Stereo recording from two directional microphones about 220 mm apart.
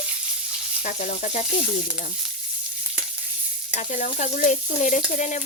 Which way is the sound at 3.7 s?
35° left (ahead or behind).